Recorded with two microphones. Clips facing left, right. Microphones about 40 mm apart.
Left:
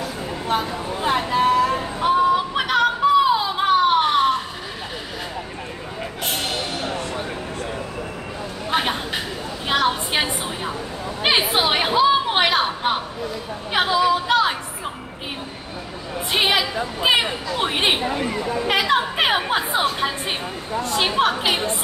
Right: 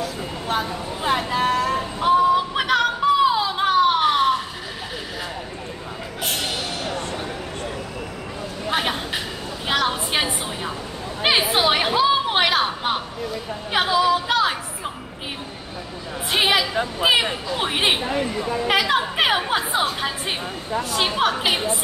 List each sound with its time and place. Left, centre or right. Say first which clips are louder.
0.5 s female singing: left 2 dB; centre
6.2 s music: even; centre
8.6 s a sound: left 1 dB; centre
13.7 s female singing: even; centre
16.3 s a sound: even; centre
20.9 s a woman's voice: left 2 dB; centre